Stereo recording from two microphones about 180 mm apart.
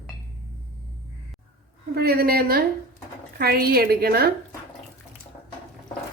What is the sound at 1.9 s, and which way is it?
A woman's voice, 60° right (ahead or behind).